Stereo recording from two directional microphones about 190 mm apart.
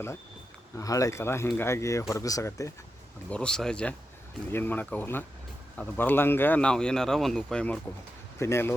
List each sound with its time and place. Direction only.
0.8 s speech: 15° left (ahead or behind)
3.2 s speech: 5° left (ahead or behind)